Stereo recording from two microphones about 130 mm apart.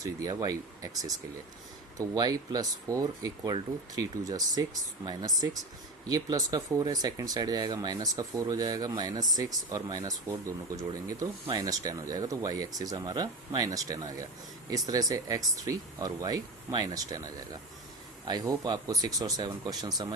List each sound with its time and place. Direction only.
0.0 s speech: 25° right (ahead or behind)